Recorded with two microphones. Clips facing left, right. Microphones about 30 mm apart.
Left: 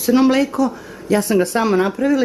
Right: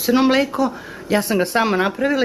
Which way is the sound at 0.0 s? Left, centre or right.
Centre.